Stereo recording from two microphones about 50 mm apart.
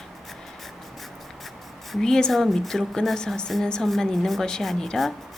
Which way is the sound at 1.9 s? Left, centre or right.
Centre.